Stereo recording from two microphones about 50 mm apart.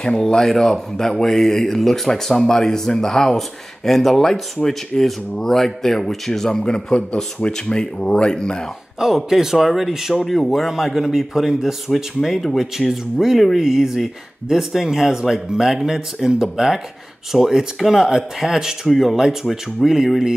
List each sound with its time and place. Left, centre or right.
0.0 s speech: centre
6.6 s speech: centre
9.0 s speech: centre